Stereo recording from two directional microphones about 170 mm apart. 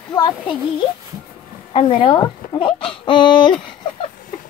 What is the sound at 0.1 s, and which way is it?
Speech, 25° left (ahead or behind).